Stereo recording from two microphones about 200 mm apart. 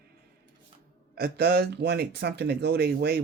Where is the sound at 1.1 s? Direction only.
50° right (ahead or behind).